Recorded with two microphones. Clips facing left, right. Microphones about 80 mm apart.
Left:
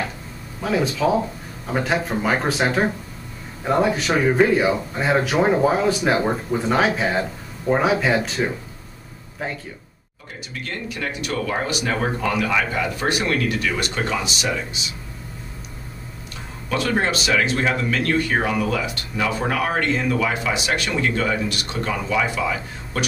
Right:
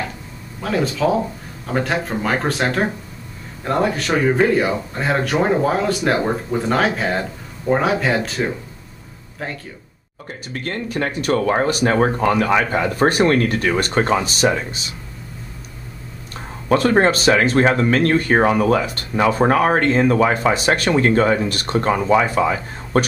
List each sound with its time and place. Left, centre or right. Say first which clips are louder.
0.6 s speech: right 1 dB; centre
10.5 s speech: right 6 dB; right
16.6 s speech: right 7 dB; right